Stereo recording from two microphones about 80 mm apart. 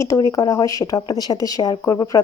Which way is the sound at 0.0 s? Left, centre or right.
Left.